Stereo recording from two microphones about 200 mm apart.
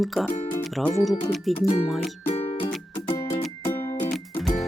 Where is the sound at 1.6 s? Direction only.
30° left (ahead or behind).